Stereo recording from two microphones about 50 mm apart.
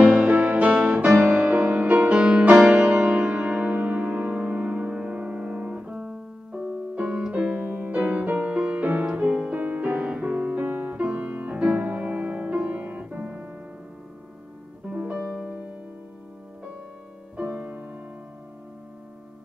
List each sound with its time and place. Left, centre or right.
0.0 s music: right
5.8 s piano: centre
7.2 s keyboard: centre
7.5 s music: right
15.0 s music: centre
17.4 s music: right